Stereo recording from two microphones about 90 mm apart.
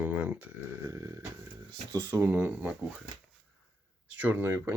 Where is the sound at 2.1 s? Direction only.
20° right (ahead or behind).